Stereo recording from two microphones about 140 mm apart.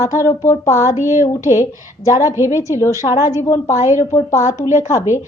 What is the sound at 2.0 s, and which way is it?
Speech, 20° left (ahead or behind).